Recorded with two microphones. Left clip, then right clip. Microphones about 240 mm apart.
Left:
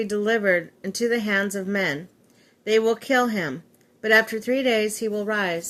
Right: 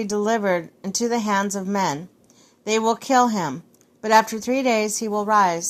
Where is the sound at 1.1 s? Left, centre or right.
Right.